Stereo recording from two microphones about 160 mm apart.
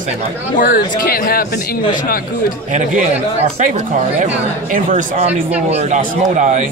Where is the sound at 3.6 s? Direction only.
50° right (ahead or behind).